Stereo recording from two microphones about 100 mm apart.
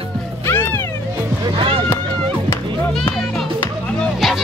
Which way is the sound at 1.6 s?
65° right (ahead or behind).